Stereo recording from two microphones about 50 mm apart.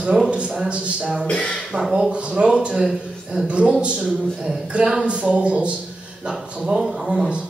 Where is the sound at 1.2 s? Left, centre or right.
Left.